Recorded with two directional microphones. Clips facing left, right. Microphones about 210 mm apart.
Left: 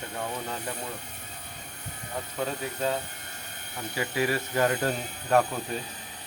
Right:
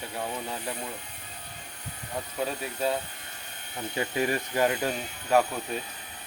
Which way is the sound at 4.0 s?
20° right (ahead or behind).